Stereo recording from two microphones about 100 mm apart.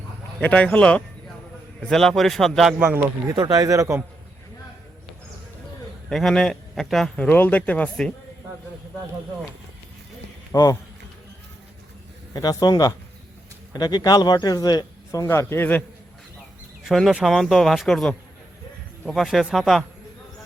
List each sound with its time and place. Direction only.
0.3 s a man's voice: 15° left (ahead or behind)
2.7 s speech: 20° right (ahead or behind)
3.3 s speech: 40° right (ahead or behind)
6.1 s a man's voice: 5° left (ahead or behind)
7.3 s speech: 15° left (ahead or behind)
10.5 s speech: 35° left (ahead or behind)
12.3 s a man's voice: 40° left (ahead or behind); by 15.8 s 20° left (ahead or behind)
16.8 s a man's voice: centre (ahead or behind)